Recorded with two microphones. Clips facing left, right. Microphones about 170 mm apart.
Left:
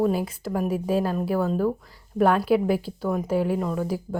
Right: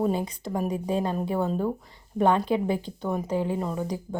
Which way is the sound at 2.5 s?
20° right (ahead or behind).